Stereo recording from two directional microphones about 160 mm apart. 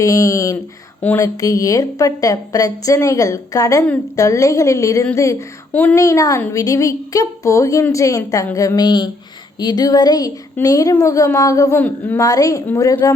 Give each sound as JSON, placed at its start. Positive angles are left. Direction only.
{"t": 0.0, "sound": "speech", "side_deg": 20}